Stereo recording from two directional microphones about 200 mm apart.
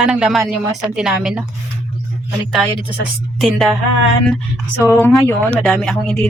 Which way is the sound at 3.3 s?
Centre (ahead or behind).